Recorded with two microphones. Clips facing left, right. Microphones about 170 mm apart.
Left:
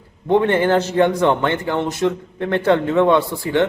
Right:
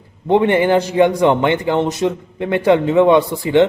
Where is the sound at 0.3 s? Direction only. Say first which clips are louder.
Right 2 dB; 15° right (ahead or behind).